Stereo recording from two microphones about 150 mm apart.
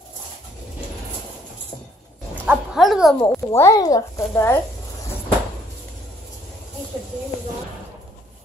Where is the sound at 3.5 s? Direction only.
20° left (ahead or behind).